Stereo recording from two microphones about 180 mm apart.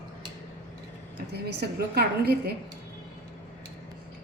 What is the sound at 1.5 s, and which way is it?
A woman's voice, 65° right (ahead or behind).